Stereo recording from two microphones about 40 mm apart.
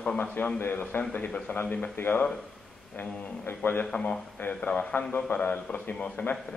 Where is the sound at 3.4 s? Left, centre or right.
Left.